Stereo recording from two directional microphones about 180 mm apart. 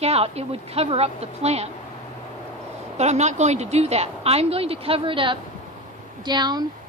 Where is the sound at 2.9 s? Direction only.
40° right (ahead or behind).